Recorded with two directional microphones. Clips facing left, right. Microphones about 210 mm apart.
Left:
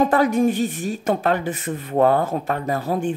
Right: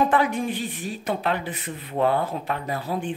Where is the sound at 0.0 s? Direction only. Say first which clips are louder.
Left 5 dB; 40° left (ahead or behind).